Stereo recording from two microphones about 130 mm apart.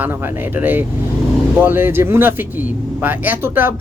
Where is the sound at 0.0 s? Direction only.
15° right (ahead or behind).